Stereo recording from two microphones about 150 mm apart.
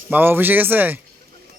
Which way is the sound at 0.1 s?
15° right (ahead or behind).